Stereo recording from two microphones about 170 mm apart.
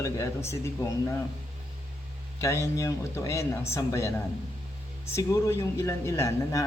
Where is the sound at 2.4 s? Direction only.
20° left (ahead or behind).